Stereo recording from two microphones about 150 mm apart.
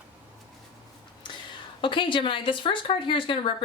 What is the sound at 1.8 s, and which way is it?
Speech, 35° left (ahead or behind).